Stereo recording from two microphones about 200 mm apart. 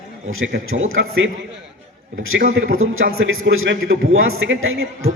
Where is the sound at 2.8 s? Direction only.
90° right.